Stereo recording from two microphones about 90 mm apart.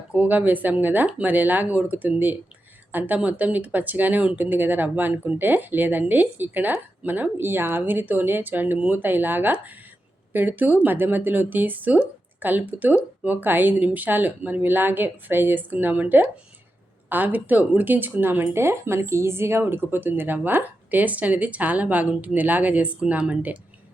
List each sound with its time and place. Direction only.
0.1 s speech: 20° right (ahead or behind)